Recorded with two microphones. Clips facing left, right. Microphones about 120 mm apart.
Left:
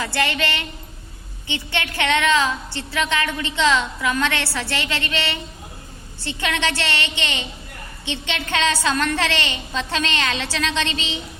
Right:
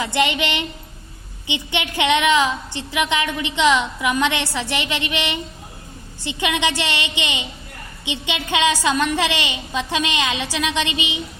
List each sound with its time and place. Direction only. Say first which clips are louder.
0.0 s a woman's voice: right 3 dB; 20° right (ahead or behind)